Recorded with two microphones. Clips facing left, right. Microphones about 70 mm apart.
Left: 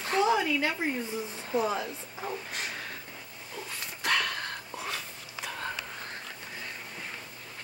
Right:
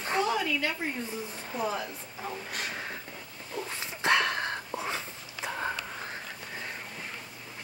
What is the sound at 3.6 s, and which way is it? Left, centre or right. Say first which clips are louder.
Dog: right 4 dB; right.